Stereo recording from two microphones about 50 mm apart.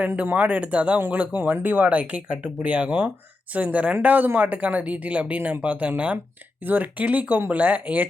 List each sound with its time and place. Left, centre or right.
0.2 s speech: right
0.9 s speech: right
4.0 s speech: right